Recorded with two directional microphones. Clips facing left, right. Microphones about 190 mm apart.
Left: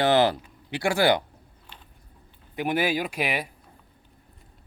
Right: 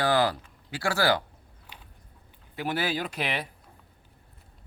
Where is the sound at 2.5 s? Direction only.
15° left (ahead or behind).